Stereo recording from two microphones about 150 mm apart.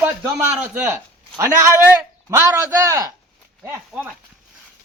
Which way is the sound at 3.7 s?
10° right (ahead or behind).